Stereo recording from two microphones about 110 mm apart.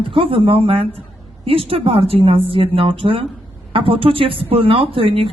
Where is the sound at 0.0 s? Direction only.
55° right (ahead or behind).